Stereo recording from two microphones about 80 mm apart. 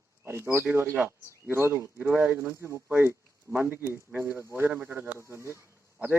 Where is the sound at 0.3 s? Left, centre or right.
Right.